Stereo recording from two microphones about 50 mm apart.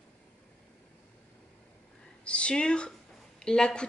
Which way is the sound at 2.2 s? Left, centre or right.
Left.